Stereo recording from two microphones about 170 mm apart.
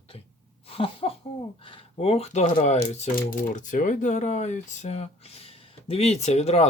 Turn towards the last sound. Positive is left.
turn(degrees=40)  # may be behind; listen again after turning